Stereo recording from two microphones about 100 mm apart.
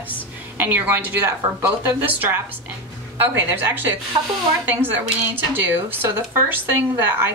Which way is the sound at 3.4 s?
20° right (ahead or behind).